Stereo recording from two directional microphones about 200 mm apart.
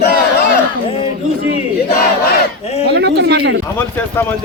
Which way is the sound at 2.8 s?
55° right (ahead or behind).